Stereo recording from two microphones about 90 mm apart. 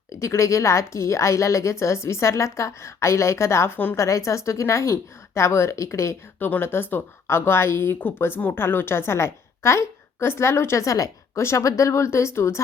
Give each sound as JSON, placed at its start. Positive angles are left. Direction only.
{"t": 0.1, "sound": "a woman's voice", "side_deg": 35}